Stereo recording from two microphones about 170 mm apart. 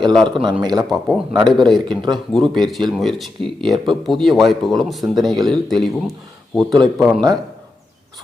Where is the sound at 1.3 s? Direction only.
25° right (ahead or behind).